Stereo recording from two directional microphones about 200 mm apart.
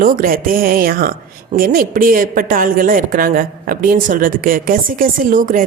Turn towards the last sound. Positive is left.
turn(degrees=-40)  # may be behind; listen again after turning